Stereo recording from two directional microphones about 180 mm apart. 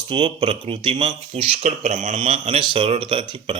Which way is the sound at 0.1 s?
30° right (ahead or behind).